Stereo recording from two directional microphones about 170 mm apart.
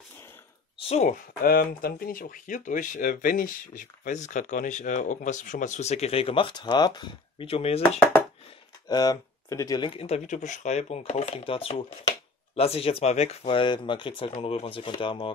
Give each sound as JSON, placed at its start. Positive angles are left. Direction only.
{"t": 0.8, "sound": "speech", "side_deg": 40}
{"t": 1.4, "sound": "speech", "side_deg": 60}
{"t": 8.8, "sound": "speech", "side_deg": 25}